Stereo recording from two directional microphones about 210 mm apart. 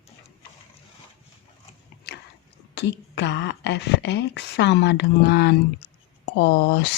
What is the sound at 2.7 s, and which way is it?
Speech, 55° left (ahead or behind).